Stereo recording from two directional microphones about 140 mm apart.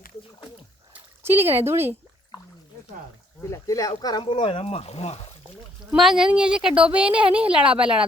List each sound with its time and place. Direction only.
0.9 s speech: 15° right (ahead or behind)
3.5 s speech: 25° left (ahead or behind); by 5.3 s 45° left (ahead or behind)
5.9 s a woman's voice: 5° right (ahead or behind)